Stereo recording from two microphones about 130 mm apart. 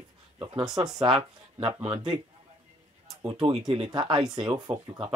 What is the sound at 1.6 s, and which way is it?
Speech, 40° right (ahead or behind).